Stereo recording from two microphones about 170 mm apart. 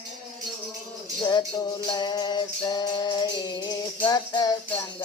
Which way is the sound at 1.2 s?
25° left (ahead or behind).